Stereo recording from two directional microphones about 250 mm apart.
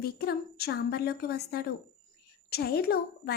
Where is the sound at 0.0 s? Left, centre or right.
Left.